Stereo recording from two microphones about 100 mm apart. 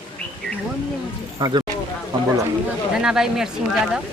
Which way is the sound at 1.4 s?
45° right (ahead or behind).